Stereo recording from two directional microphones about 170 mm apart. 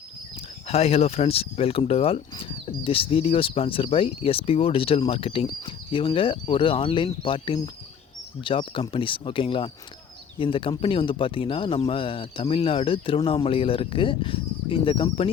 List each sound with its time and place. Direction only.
0.7 s speech: 35° left (ahead or behind)